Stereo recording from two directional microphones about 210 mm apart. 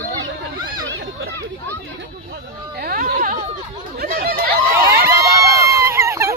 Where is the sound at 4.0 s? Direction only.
45° right (ahead or behind).